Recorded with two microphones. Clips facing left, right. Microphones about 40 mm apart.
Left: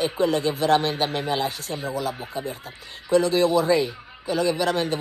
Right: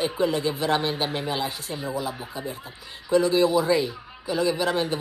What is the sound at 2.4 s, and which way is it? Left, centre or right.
Speech, left.